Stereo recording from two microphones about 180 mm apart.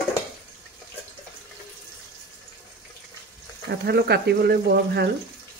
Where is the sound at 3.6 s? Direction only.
65° right (ahead or behind).